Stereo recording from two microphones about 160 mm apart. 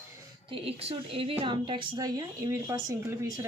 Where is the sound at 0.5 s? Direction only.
35° right (ahead or behind).